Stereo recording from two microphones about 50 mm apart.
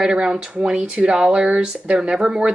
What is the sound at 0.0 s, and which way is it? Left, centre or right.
Speech, centre.